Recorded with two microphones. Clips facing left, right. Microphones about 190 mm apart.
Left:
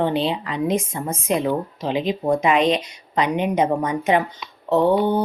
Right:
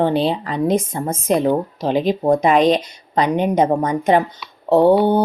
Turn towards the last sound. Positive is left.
turn(degrees=-35)  # may be behind; listen again after turning